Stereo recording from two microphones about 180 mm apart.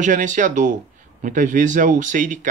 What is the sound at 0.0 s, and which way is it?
Speech, 45° right (ahead or behind).